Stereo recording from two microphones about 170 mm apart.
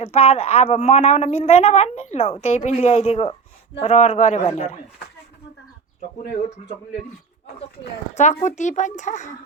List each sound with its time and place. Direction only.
0.0 s speech: 40° left (ahead or behind)
8.1 s speech: 45° left (ahead or behind)